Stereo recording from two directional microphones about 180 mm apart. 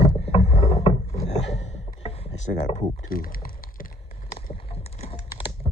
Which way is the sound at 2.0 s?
35° left (ahead or behind).